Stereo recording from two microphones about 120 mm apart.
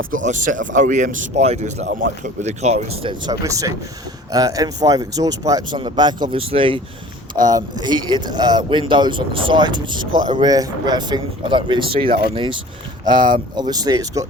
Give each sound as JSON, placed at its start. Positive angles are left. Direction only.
{"t": 0.2, "sound": "speech", "side_deg": -90}
{"t": 3.4, "sound": "speech", "side_deg": -30}
{"t": 7.4, "sound": "speech", "side_deg": -35}